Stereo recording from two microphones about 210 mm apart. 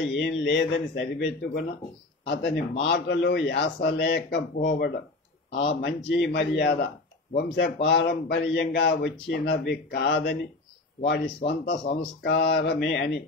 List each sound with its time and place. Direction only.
0.2 s a man's voice: 55° left (ahead or behind)